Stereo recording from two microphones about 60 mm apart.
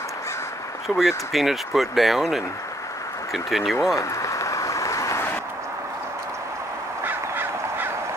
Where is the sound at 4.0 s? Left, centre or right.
Left.